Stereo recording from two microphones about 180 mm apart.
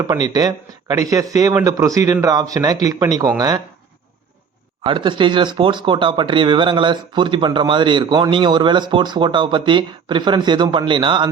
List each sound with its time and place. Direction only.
0.0 s speech: 20° right (ahead or behind)
4.8 s speech: 30° right (ahead or behind)